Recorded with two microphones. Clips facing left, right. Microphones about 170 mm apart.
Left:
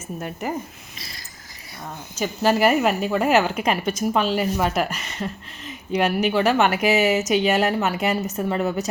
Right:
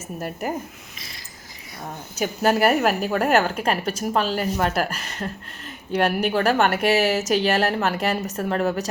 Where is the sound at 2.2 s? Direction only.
Centre (ahead or behind).